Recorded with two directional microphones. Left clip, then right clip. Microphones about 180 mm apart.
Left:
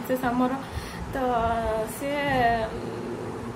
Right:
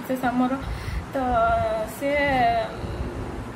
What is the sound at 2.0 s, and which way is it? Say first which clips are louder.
Female singing: right 4 dB; centre (ahead or behind).